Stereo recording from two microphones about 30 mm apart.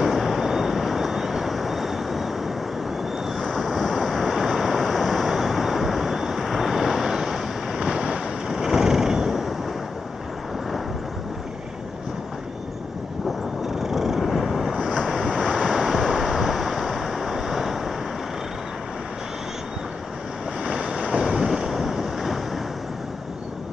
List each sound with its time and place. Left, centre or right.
0.0 s vehicle: centre
3.5 s waves: centre
4.5 s vehicle: centre
7.8 s waves: right
8.5 s a sound: centre
13.7 s vehicle: centre
15.7 s waves: centre
16.6 s vehicle: centre
20.6 s wind noise: right
21.5 s wind noise: centre